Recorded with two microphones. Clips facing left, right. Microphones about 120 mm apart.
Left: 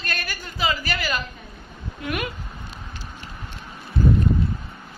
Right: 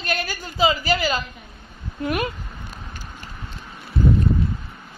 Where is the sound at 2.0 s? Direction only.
35° right (ahead or behind).